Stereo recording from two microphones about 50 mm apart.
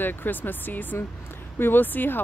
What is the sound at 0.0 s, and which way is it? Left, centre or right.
Speech, left.